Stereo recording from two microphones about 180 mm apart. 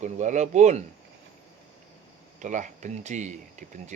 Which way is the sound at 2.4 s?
45° right (ahead or behind).